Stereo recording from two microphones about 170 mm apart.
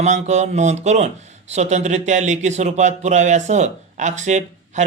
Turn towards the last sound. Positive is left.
turn(degrees=-45)  # may be behind; listen again after turning